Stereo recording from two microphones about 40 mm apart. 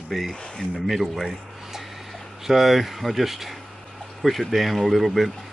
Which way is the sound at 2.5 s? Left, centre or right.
Centre.